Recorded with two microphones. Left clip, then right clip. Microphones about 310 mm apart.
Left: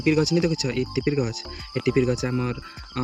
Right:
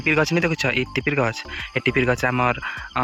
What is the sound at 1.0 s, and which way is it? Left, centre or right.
Speech, centre.